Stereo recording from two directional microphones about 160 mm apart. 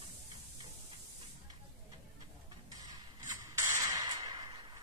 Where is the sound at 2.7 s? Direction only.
25° right (ahead or behind).